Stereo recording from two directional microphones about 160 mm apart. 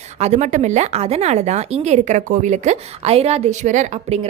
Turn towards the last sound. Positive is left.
turn(degrees=-50)  # may be behind; listen again after turning